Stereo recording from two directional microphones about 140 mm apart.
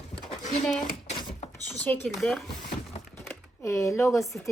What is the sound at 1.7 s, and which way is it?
Speech, 15° left (ahead or behind).